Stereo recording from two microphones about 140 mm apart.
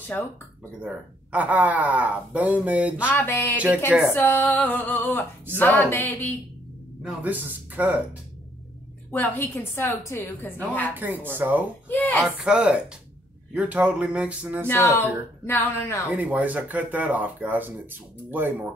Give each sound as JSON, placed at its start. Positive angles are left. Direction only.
{"t": 0.7, "sound": "speech", "side_deg": -10}
{"t": 3.1, "sound": "speech", "side_deg": 10}
{"t": 3.5, "sound": "speech", "side_deg": -10}
{"t": 4.1, "sound": "speech", "side_deg": 15}
{"t": 7.0, "sound": "speech", "side_deg": -10}
{"t": 9.1, "sound": "speech", "side_deg": 15}
{"t": 11.3, "sound": "speech", "side_deg": -15}
{"t": 11.9, "sound": "speech", "side_deg": 10}
{"t": 12.2, "sound": "speech", "side_deg": -5}
{"t": 14.7, "sound": "speech", "side_deg": 15}
{"t": 16.2, "sound": "speech", "side_deg": -10}